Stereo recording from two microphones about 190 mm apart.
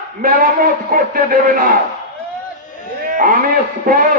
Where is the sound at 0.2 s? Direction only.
45° right (ahead or behind).